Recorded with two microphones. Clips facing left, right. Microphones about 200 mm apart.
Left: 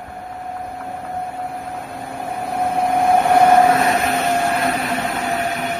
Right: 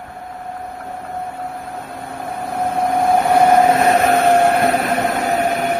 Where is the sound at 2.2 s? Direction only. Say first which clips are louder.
Even; 10° left (ahead or behind).